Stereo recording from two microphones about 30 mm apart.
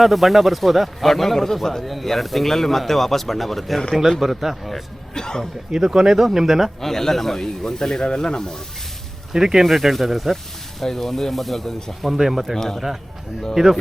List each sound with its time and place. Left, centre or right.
0.0 s speech: centre
1.8 s speech: centre
5.1 s speech: left
5.7 s speech: right
6.8 s speech: centre
9.3 s speech: centre
9.6 s speech: centre
12.1 s speech: centre
12.5 s speech: centre
13.5 s speech: centre